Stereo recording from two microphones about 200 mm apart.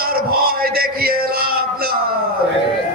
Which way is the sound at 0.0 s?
50° right (ahead or behind).